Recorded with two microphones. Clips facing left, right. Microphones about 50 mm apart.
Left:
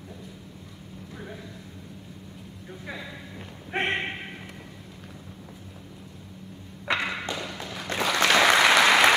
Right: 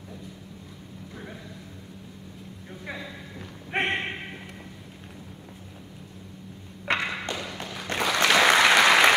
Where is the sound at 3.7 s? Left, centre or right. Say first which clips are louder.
Right 1 dB; right.